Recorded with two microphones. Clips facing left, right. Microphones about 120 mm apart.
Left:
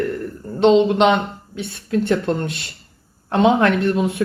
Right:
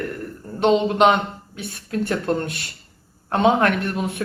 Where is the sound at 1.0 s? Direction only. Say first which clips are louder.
Left 1 dB; 25° left (ahead or behind).